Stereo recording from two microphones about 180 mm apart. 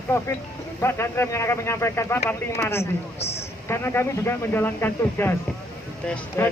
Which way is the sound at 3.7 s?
15° left (ahead or behind).